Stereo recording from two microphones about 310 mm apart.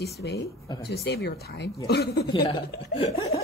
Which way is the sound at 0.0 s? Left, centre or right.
Left.